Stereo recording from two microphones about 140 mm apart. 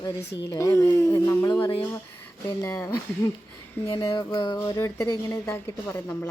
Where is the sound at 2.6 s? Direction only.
20° left (ahead or behind).